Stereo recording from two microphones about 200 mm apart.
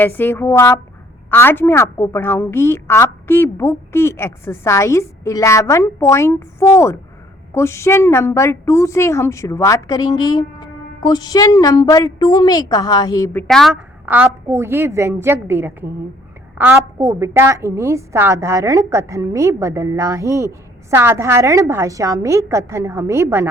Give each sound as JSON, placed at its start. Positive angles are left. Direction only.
{"t": 0.0, "sound": "a woman's voice", "side_deg": 10}
{"t": 13.5, "sound": "a woman's voice", "side_deg": 0}